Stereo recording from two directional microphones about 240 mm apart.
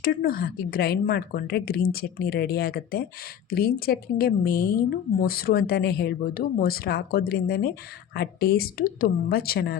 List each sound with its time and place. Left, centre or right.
0.0 s a woman's voice: left